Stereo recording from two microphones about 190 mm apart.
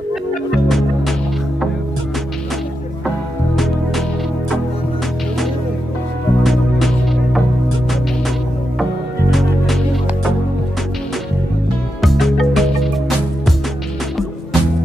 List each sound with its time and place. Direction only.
0.7 s music: centre (ahead or behind)
6.4 s music: centre (ahead or behind)
9.3 s music: centre (ahead or behind)
12.0 s music: centre (ahead or behind)